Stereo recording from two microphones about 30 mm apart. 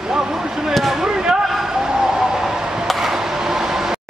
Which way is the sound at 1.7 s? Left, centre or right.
Right.